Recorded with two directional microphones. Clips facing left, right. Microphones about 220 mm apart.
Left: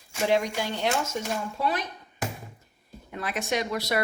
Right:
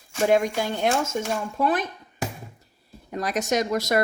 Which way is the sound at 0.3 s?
50° right (ahead or behind).